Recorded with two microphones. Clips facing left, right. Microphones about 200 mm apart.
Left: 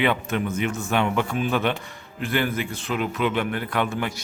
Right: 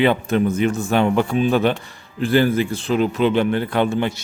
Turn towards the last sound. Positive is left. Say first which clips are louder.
# right 6 dB
turn(degrees=-30)  # may be behind; listen again after turning